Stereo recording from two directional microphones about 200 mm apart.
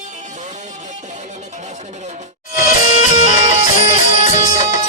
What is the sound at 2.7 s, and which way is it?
Music, 40° left (ahead or behind).